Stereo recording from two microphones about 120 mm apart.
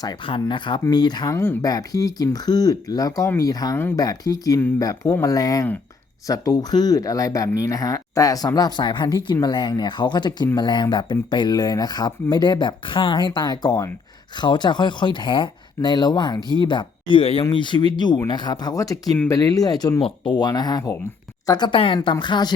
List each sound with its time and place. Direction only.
0.0 s speech: 40° left (ahead or behind)
20.0 s speech: 45° left (ahead or behind)